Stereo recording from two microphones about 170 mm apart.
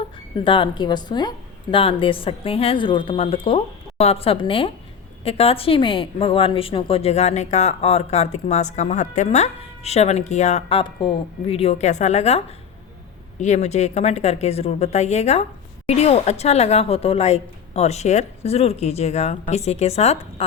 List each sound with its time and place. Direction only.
0.4 s a woman's voice: 30° left (ahead or behind)
13.4 s a woman's voice: 40° left (ahead or behind)